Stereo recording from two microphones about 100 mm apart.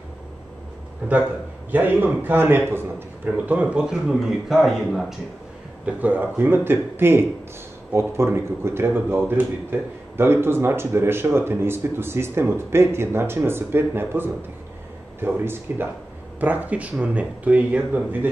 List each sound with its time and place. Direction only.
1.7 s a man's voice: 20° right (ahead or behind); by 5.0 s centre (ahead or behind)
5.9 s speech: 15° right (ahead or behind)